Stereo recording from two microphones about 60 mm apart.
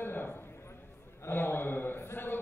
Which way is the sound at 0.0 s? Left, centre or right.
Left.